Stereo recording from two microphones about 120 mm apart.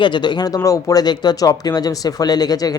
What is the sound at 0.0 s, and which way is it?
Speech, 40° left (ahead or behind).